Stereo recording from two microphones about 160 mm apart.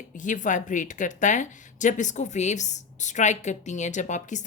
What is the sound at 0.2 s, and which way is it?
Speech, 50° left (ahead or behind).